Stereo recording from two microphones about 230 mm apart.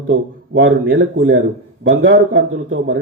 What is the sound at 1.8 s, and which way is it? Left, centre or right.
A man's voice, right.